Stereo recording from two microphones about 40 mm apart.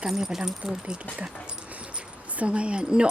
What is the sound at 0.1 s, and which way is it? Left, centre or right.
Speech, centre.